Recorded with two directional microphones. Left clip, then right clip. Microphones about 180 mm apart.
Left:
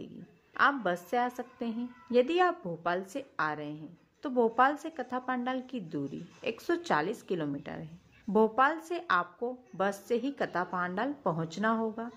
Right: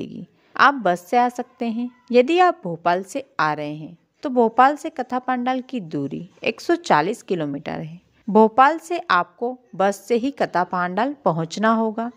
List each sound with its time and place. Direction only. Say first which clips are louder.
0.0 s a woman's voice: right 13 dB; 50° right (ahead or behind)